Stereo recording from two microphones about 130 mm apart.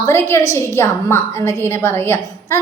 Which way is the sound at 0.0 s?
20° left (ahead or behind).